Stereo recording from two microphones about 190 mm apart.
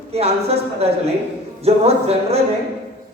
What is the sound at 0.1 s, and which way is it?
A man's voice, 30° right (ahead or behind).